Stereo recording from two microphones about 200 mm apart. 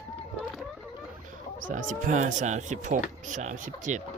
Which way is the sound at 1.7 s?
40° right (ahead or behind).